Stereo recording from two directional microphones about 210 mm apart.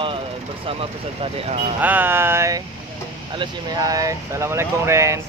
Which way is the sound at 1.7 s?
10° right (ahead or behind).